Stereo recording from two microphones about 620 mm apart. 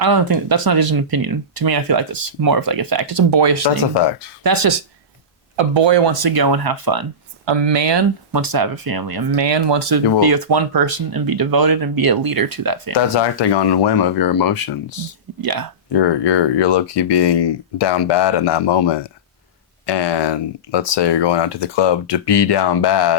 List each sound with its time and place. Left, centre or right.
0.0 s speech: right
5.5 s speech: right
12.9 s speech: left
15.4 s speech: right
16.0 s speech: left